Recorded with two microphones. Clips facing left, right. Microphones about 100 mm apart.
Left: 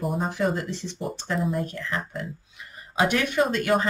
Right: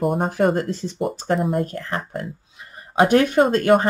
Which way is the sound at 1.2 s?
60° right (ahead or behind).